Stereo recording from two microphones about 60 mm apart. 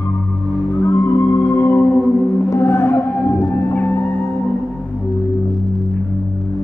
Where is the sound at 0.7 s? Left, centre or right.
Left.